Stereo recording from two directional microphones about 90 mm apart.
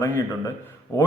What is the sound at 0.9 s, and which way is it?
Speech, 35° left (ahead or behind).